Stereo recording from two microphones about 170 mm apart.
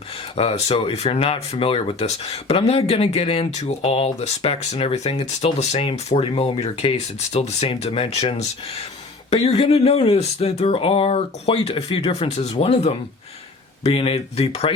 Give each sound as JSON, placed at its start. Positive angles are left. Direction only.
{"t": 0.3, "sound": "speech", "side_deg": 35}